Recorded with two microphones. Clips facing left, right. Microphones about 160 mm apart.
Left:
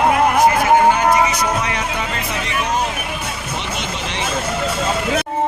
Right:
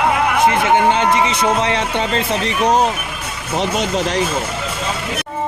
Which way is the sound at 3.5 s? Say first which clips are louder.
Right 11 dB; 40° right (ahead or behind).